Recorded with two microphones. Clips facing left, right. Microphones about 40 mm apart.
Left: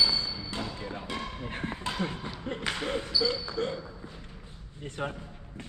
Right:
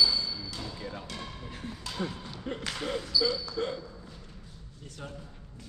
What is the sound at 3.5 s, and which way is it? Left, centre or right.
Hiccup, left.